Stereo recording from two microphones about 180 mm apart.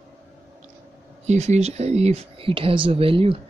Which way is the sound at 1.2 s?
40° right (ahead or behind).